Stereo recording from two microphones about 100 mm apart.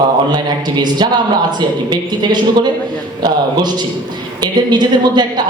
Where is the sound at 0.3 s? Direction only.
45° right (ahead or behind).